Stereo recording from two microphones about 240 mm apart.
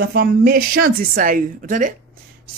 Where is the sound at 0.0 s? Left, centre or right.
Right.